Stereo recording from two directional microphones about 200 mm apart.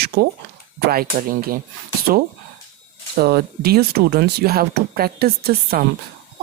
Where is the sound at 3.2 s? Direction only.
50° right (ahead or behind).